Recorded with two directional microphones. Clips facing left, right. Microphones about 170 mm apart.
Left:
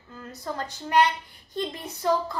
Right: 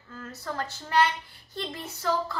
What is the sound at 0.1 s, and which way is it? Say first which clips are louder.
A woman's voice: left 1 dB; 15° left (ahead or behind).